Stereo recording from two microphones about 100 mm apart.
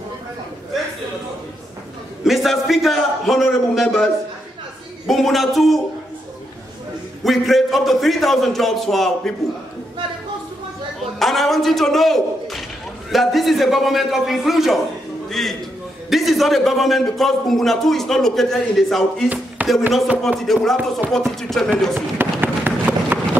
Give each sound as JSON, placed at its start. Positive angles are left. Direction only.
{"t": 2.2, "sound": "a man's voice", "side_deg": 0}
{"t": 7.2, "sound": "a man's voice", "side_deg": 0}
{"t": 11.1, "sound": "a man's voice", "side_deg": 0}
{"t": 19.2, "sound": "a sound", "side_deg": -15}
{"t": 20.3, "sound": "a man's voice", "side_deg": 0}
{"t": 21.9, "sound": "run", "side_deg": -20}